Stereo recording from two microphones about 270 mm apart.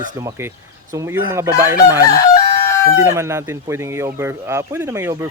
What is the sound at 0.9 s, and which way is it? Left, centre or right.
Speech, centre.